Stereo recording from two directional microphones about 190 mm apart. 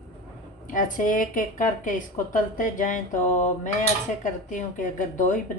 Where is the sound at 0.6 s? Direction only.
45° left (ahead or behind).